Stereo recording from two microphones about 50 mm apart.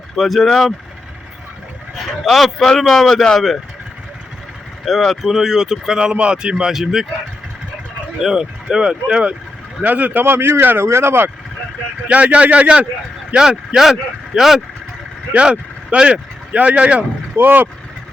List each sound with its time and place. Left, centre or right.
0.2 s speech: centre
2.0 s speech: centre
4.9 s speech: centre
8.2 s speech: centre
9.8 s speech: right
10.3 s speech: right
10.8 s speech: right
12.0 s speech: right
13.7 s speech: centre
15.4 s speech: right
17.3 s speech: right